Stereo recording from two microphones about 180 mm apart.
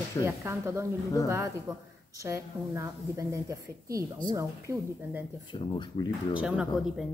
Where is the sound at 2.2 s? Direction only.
20° right (ahead or behind).